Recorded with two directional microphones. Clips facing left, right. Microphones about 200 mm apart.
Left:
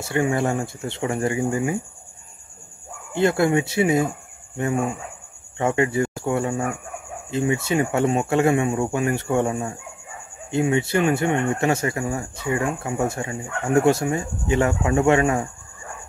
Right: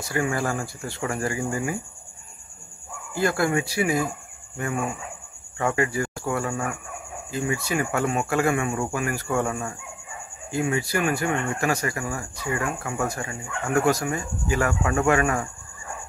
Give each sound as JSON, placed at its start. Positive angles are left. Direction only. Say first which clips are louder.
{"t": 0.0, "sound": "speech", "louder": "left 4 dB", "side_deg": 25}
{"t": 3.1, "sound": "speech", "louder": "left 4 dB", "side_deg": 25}